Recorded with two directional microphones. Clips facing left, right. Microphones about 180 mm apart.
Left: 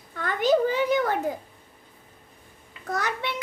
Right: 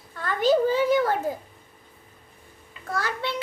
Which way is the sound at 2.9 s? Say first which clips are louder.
Even; 20° left (ahead or behind).